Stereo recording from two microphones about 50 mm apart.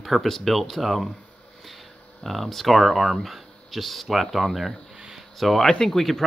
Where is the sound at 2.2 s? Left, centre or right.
Centre.